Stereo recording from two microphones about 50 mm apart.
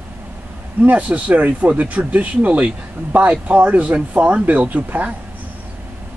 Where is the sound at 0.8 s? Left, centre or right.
Right.